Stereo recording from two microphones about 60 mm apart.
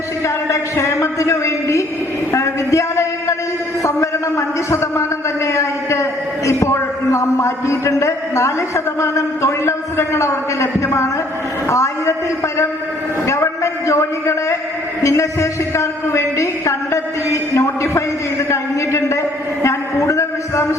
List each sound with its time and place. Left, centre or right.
0.4 s a woman's voice: left
2.3 s a sound: left
5.5 s a man's voice: left
13.2 s a woman's voice: left